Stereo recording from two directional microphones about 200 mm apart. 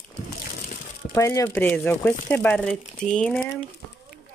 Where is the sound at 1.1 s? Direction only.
15° left (ahead or behind).